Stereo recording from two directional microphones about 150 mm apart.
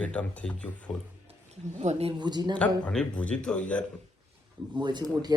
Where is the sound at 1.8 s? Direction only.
45° right (ahead or behind).